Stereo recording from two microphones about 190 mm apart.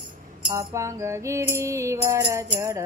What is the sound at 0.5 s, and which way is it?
Music, 15° right (ahead or behind).